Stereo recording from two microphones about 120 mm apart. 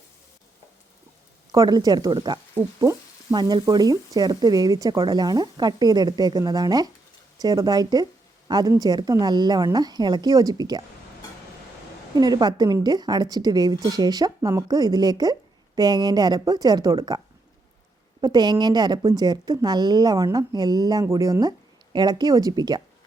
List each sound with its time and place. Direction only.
1.5 s a woman's voice: 35° right (ahead or behind)
2.6 s sizzle: 20° right (ahead or behind)
3.3 s a woman's voice: 35° right (ahead or behind)
12.1 s a woman's voice: 35° right (ahead or behind)
18.2 s a woman's voice: 35° right (ahead or behind)